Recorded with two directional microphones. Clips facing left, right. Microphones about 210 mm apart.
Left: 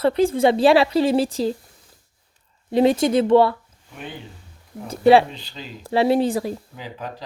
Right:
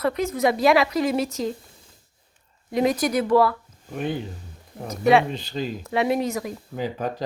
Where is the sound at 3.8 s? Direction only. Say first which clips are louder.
Right 8 dB; 45° right (ahead or behind).